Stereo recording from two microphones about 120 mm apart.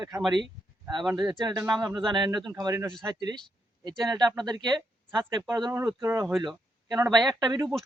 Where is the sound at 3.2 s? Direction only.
35° right (ahead or behind).